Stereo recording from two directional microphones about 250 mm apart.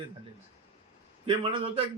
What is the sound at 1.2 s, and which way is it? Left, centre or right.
Speech, right.